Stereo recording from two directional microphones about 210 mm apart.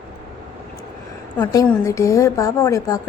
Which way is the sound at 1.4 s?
15° left (ahead or behind).